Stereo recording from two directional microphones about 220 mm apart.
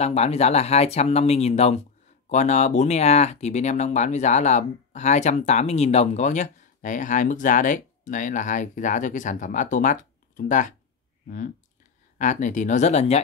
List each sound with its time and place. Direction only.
0.0 s speech: 30° left (ahead or behind)